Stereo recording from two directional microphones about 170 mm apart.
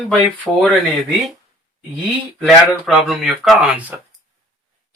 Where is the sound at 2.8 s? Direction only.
Centre (ahead or behind).